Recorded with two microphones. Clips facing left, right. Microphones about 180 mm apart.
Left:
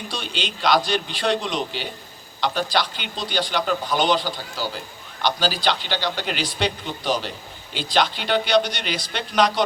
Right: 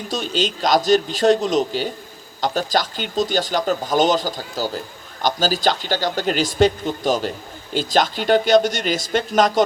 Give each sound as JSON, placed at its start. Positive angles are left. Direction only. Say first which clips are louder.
{"t": 0.1, "sound": "speech", "louder": "right 10 dB", "side_deg": -45}